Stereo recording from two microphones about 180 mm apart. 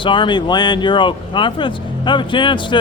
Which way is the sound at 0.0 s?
25° left (ahead or behind).